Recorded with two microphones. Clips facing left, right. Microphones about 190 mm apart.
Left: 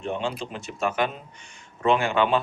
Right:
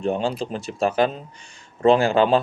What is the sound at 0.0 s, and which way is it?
Speech, 35° right (ahead or behind).